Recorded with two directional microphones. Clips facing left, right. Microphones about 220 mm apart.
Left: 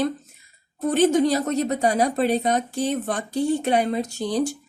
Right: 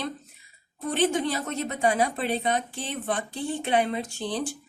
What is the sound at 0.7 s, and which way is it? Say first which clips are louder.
A woman's voice: left 7 dB; 45° left (ahead or behind).